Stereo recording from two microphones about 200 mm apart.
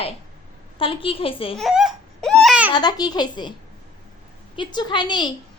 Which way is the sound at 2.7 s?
20° left (ahead or behind).